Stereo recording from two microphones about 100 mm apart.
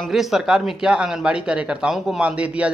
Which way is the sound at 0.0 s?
5° right (ahead or behind).